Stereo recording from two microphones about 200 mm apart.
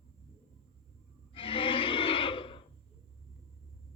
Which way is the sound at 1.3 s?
25° left (ahead or behind).